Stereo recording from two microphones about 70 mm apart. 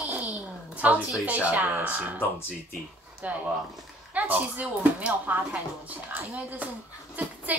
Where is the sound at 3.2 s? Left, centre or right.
Centre.